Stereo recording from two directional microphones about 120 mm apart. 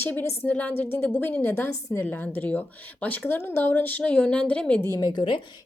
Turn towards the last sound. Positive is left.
turn(degrees=40)  # may be behind; listen again after turning